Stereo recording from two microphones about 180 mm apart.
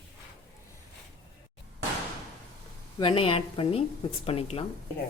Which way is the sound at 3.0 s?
30° left (ahead or behind).